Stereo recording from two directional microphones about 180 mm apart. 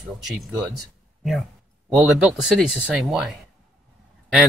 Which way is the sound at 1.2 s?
Centre (ahead or behind).